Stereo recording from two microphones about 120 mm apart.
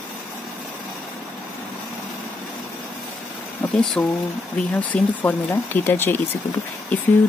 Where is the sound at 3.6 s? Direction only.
15° left (ahead or behind).